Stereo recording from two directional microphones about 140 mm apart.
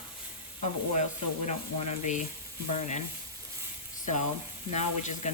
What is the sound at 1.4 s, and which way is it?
Speech, 55° left (ahead or behind).